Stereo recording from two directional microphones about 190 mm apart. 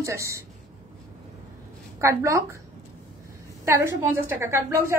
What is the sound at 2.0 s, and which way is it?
Speech, 15° right (ahead or behind).